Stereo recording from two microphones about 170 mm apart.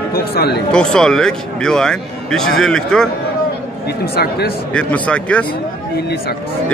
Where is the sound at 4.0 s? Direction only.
65° left (ahead or behind).